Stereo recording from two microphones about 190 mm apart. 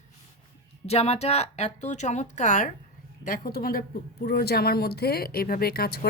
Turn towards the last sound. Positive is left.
turn(degrees=55)  # may be behind; listen again after turning